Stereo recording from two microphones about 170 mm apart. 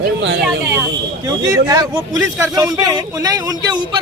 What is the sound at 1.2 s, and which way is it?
A man's voice, 20° right (ahead or behind).